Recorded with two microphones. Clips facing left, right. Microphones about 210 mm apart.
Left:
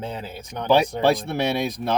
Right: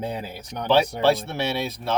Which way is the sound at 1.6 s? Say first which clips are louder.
Left 3 dB; 15° left (ahead or behind).